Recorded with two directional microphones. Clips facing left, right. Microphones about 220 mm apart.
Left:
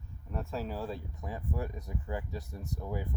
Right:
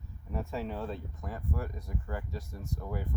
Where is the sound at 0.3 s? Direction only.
Centre (ahead or behind).